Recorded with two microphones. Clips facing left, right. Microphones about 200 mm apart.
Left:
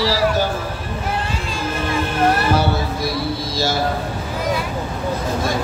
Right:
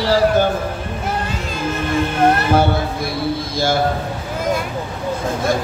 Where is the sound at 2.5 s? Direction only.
55° right (ahead or behind).